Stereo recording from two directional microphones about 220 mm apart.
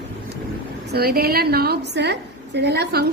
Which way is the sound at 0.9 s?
45° right (ahead or behind).